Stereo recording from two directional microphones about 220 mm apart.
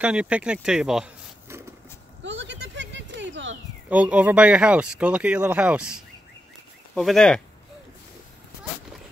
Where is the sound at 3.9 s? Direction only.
5° right (ahead or behind).